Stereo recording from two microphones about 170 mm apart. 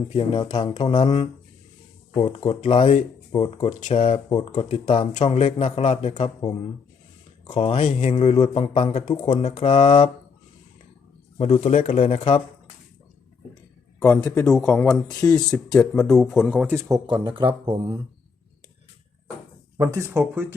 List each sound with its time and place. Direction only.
0.1 s a man's voice: 35° left (ahead or behind)
3.9 s a man's voice: 30° left (ahead or behind)
7.5 s a man's voice: 40° left (ahead or behind)
11.3 s a man's voice: 35° left (ahead or behind)
14.0 s speech: 20° left (ahead or behind)
14.4 s speech: 5° left (ahead or behind)
15.2 s speech: 15° left (ahead or behind)
15.7 s speech: 5° left (ahead or behind)
17.1 s speech: 25° right (ahead or behind)
19.7 s speech: 20° right (ahead or behind)